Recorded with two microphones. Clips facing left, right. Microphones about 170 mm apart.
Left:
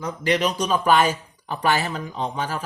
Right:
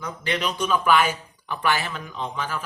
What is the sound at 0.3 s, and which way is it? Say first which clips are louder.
Speech: left 3 dB; 40° left (ahead or behind).